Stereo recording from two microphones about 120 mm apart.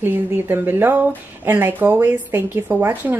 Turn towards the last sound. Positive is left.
turn(degrees=-15)  # may be behind; listen again after turning